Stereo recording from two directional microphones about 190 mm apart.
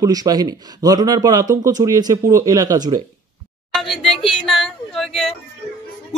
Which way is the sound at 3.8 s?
Centre (ahead or behind).